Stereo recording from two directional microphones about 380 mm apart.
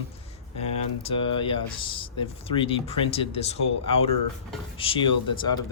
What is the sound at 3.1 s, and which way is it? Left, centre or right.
Speech, centre.